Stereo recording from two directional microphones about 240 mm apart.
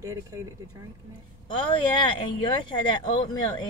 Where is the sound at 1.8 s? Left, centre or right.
Centre.